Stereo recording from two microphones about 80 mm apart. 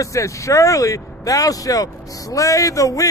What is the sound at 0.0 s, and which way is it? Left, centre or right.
Speech, left.